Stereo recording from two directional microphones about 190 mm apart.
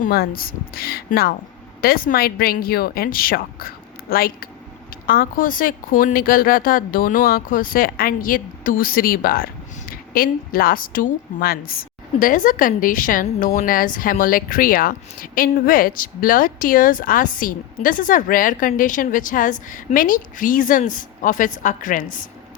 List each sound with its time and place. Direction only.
0.0 s a woman's voice: 50° left (ahead or behind)